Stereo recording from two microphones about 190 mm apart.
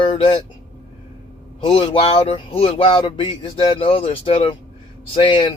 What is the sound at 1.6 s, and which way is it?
Speech, 30° left (ahead or behind).